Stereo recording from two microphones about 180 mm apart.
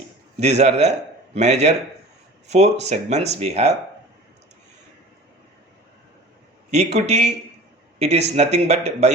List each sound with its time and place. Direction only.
0.3 s a man's voice: 40° right (ahead or behind)
6.7 s speech: 40° right (ahead or behind)